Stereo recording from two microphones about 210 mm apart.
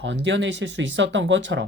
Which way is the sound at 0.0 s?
60° right (ahead or behind).